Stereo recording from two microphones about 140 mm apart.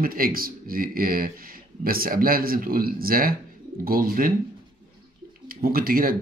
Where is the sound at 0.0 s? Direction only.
90° right.